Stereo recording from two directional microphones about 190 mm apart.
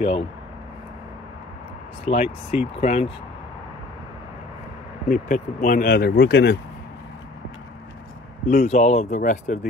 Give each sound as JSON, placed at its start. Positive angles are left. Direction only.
{"t": 0.0, "sound": "speech", "side_deg": 30}
{"t": 2.0, "sound": "speech", "side_deg": 35}
{"t": 5.0, "sound": "speech", "side_deg": 40}
{"t": 8.5, "sound": "speech", "side_deg": 35}